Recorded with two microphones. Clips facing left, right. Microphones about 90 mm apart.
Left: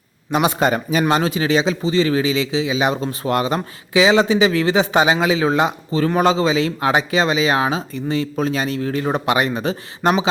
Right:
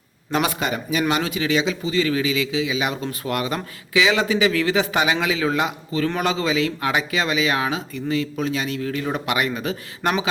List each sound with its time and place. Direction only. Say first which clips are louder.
0.3 s a man's voice: left 4 dB; 15° left (ahead or behind)
0.6 s speech: left 5 dB; 40° left (ahead or behind)